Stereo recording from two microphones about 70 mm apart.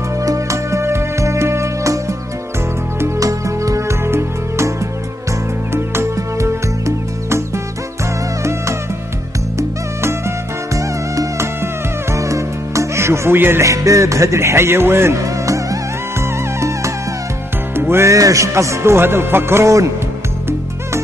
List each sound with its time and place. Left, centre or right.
0.2 s music: right
3.2 s music: right
13.7 s music: right
15.1 s music: right
18.1 s speech: right